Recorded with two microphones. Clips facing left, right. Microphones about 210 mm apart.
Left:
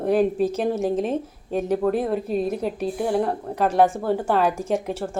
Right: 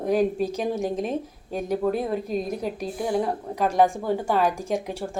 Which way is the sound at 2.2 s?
35° left (ahead or behind).